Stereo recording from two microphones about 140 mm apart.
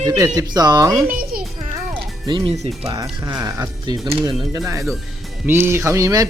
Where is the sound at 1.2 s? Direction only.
90° right.